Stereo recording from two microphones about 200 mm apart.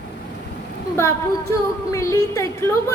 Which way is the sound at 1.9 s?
15° left (ahead or behind).